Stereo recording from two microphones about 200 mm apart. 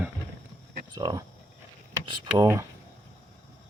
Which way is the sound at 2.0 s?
25° right (ahead or behind).